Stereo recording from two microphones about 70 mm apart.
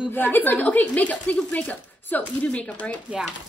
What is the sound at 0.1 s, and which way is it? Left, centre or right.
Speech, left.